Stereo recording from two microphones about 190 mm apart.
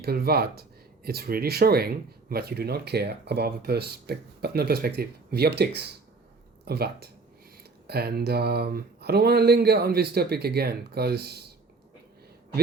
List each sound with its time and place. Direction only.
0.0 s speech: 55° right (ahead or behind)